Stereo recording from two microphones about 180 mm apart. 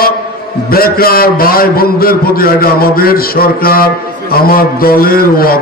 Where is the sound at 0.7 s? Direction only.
55° left (ahead or behind).